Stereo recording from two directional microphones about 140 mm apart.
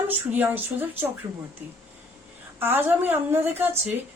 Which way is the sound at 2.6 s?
15° right (ahead or behind).